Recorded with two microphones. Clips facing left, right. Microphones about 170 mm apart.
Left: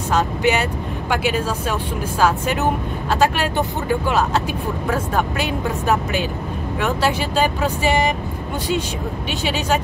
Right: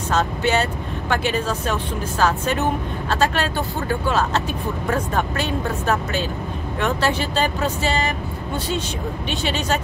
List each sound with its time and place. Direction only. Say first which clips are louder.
0.1 s speech: left 2 dB; 10° left (ahead or behind)
9.4 s speech: left 3 dB; 10° left (ahead or behind)